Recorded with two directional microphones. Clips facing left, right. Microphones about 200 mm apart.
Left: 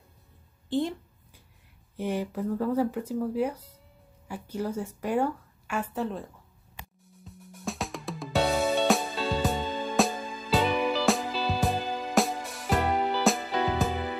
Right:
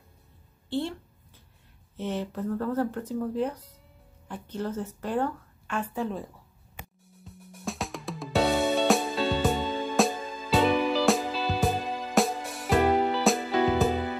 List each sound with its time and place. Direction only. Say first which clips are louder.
0.7 s speech: left 2 dB; 15° left (ahead or behind)
2.0 s speech: left 1 dB; 10° left (ahead or behind)
7.2 s music: even; centre (ahead or behind)